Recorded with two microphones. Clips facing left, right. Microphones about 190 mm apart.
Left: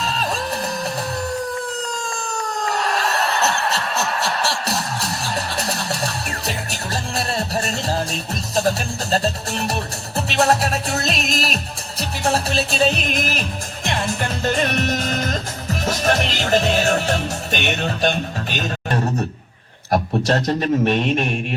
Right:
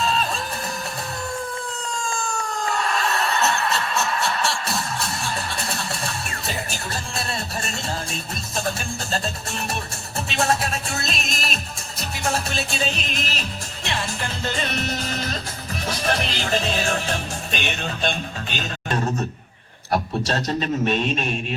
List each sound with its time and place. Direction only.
0.0 s music: 40° left (ahead or behind)
2.0 s a sound: 40° left (ahead or behind)
6.7 s music: 35° left (ahead or behind)
13.1 s music: 55° left (ahead or behind)
19.9 s a man's voice: 55° left (ahead or behind)